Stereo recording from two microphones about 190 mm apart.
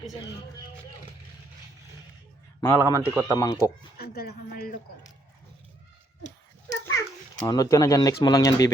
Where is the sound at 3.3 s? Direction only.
20° left (ahead or behind).